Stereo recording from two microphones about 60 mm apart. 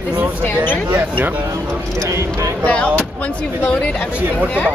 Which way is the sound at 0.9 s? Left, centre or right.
Right.